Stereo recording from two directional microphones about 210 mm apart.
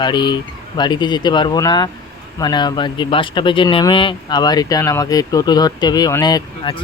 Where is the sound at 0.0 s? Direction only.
20° left (ahead or behind).